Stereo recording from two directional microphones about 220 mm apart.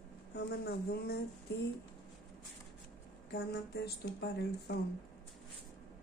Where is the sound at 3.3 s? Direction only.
50° left (ahead or behind).